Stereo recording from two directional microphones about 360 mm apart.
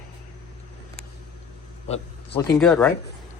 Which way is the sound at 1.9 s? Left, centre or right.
Centre.